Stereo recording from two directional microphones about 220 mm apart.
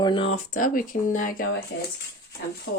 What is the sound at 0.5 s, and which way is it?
Speech, 40° left (ahead or behind).